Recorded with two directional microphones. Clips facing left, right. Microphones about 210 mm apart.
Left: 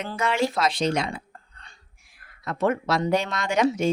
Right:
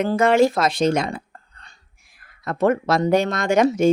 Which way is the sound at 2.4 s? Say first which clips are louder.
Right 5 dB; 45° right (ahead or behind).